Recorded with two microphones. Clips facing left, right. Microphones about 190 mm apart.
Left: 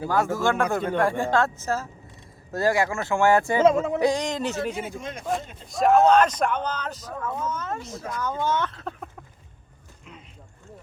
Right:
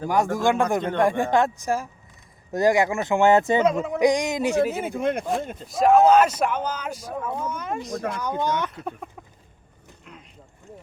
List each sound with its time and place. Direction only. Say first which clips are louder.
0.1 s speech: right 2 dB; 15° right (ahead or behind)
4.8 s speech: right 8 dB; 60° right (ahead or behind)
5.6 s speech: right 2 dB; centre (ahead or behind)